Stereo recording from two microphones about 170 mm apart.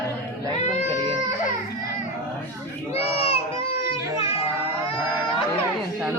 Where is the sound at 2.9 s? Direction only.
35° left (ahead or behind).